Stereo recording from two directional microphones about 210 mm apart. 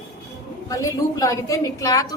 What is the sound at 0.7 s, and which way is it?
A woman's voice, 15° left (ahead or behind).